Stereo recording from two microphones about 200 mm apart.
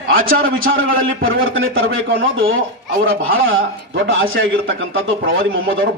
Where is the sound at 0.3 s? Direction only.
45° right (ahead or behind).